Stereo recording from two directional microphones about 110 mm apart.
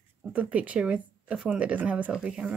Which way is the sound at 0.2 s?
10° right (ahead or behind).